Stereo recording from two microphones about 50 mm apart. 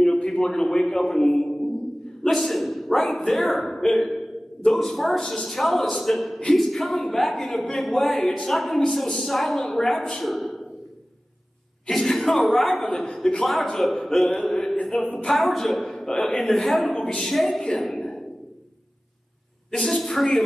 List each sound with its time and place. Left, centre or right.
0.0 s a man's voice: centre
11.9 s speech: centre
14.4 s a sound: centre
15.2 s a woman's voice: centre
16.9 s a woman's voice: centre
17.2 s a woman's voice: centre
19.7 s a woman's voice: centre